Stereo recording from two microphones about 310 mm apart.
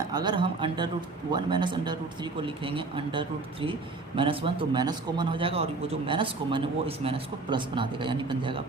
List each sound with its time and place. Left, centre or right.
0.1 s speech: centre